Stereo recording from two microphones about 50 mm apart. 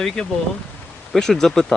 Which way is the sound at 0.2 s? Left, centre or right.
Centre.